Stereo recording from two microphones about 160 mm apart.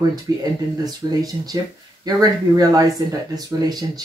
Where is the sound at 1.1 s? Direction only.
25° right (ahead or behind).